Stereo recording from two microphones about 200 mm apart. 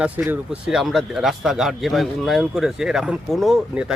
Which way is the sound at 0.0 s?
5° right (ahead or behind).